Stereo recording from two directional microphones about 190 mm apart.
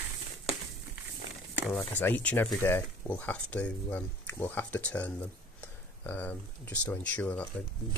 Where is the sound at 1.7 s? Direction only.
10° left (ahead or behind).